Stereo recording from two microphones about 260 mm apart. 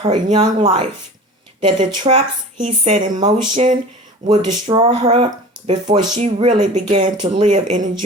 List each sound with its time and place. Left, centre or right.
0.0 s speech: right